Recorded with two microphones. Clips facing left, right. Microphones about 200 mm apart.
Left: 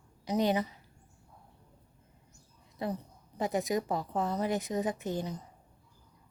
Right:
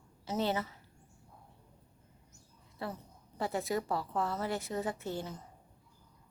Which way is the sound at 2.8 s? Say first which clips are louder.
Left 6 dB; 15° left (ahead or behind).